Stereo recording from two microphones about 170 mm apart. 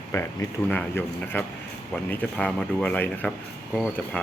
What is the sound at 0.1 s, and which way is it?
Speech, 20° left (ahead or behind).